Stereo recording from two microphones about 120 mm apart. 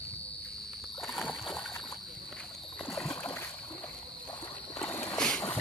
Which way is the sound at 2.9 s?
5° left (ahead or behind).